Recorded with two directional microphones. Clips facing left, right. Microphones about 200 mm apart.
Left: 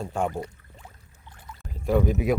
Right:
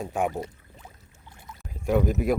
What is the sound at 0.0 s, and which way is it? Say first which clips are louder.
Speech: right 1 dB; 5° right (ahead or behind).